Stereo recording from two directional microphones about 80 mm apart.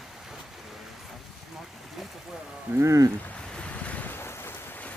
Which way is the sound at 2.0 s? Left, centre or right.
Centre.